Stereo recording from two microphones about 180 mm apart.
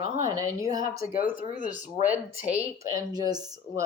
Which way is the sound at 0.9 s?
55° left (ahead or behind).